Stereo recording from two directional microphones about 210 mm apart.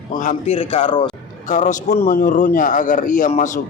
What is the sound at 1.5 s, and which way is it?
A man's voice, 35° left (ahead or behind).